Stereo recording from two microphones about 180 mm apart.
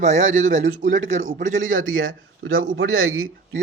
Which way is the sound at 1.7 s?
90° right.